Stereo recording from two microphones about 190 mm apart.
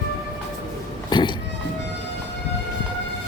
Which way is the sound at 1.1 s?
25° left (ahead or behind).